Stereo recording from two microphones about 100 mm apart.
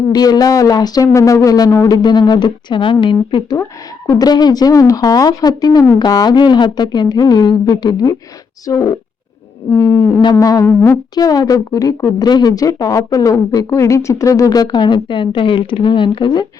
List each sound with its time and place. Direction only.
0.1 s speech: 40° left (ahead or behind)
2.0 s speech: 45° left (ahead or behind)
3.6 s speech: 30° left (ahead or behind)
4.3 s speech: 45° left (ahead or behind)
9.6 s speech: 25° left (ahead or behind)
10.4 s speech: 40° left (ahead or behind)
10.7 s speech: 25° left (ahead or behind)
11.1 s speech: 40° left (ahead or behind)